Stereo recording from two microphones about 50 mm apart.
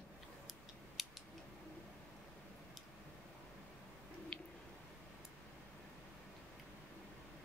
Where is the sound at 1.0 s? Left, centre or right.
Centre.